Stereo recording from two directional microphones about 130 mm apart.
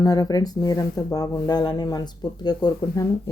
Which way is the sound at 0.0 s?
30° left (ahead or behind).